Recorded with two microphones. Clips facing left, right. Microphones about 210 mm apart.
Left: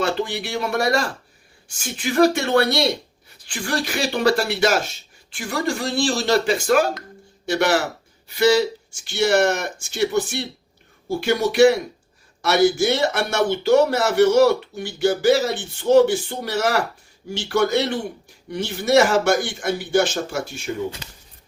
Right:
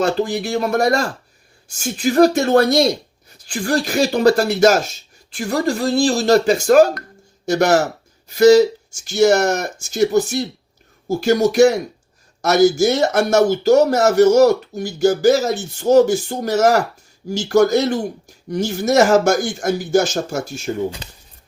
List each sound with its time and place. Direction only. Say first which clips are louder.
0.0 s speech: right 5 dB; 40° right (ahead or behind)